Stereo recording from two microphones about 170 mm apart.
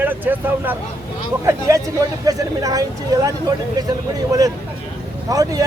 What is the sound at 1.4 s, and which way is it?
Speech, 20° right (ahead or behind).